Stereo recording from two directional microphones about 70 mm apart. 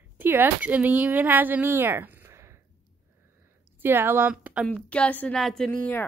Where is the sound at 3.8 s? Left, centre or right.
Right.